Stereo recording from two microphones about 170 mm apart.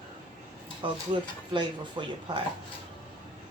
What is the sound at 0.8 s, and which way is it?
Speech, 30° right (ahead or behind).